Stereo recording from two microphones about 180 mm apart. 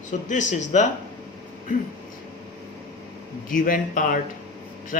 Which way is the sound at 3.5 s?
50° left (ahead or behind).